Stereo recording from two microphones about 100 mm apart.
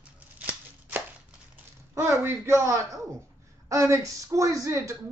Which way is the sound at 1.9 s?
25° right (ahead or behind).